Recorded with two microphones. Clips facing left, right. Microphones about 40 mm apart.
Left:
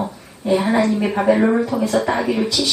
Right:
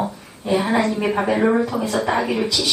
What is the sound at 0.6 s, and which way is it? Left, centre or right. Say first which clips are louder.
A woman's voice: left 2 dB; centre.